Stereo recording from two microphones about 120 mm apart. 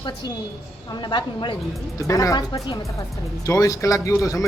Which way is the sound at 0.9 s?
40° left (ahead or behind).